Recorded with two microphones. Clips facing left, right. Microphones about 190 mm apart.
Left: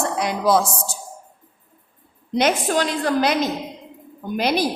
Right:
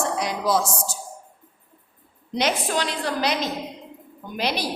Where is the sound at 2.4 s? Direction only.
50° left (ahead or behind).